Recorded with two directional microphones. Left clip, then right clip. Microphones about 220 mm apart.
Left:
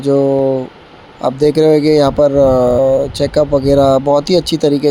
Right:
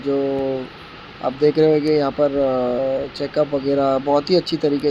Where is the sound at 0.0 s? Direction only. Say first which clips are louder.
Left 9 dB; 25° left (ahead or behind).